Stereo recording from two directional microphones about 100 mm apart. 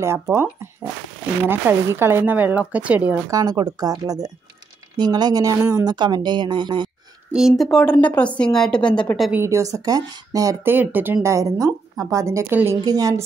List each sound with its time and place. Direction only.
0.0 s speech: 25° right (ahead or behind)
3.3 s a woman's voice: 35° right (ahead or behind)
5.9 s speech: 45° right (ahead or behind)
7.3 s a woman's voice: centre (ahead or behind)
9.5 s a woman's voice: 35° right (ahead or behind)
10.6 s speech: 20° right (ahead or behind)
11.2 s a woman's voice: 35° right (ahead or behind)